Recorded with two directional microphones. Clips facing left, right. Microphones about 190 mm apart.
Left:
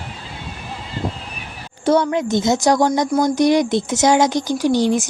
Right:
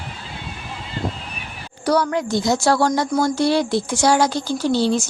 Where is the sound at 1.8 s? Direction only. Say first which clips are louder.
Left 3 dB; 25° left (ahead or behind).